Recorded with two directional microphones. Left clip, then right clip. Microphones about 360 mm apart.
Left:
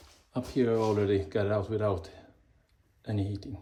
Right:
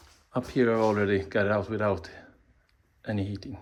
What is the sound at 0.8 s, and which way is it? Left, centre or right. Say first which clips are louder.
Speech: right 3 dB; centre.